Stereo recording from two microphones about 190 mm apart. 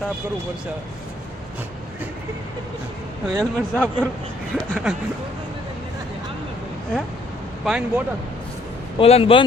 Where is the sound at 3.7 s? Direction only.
5° left (ahead or behind).